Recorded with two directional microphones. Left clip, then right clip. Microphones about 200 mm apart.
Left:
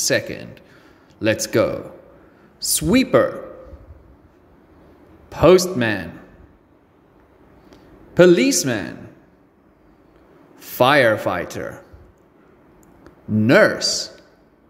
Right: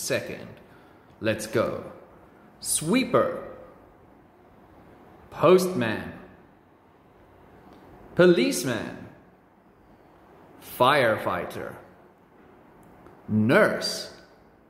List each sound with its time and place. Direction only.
0.0 s speech: 40° left (ahead or behind)
5.3 s speech: 35° left (ahead or behind)
8.1 s speech: 35° left (ahead or behind)
10.6 s speech: 35° left (ahead or behind)
13.4 s speech: 35° left (ahead or behind)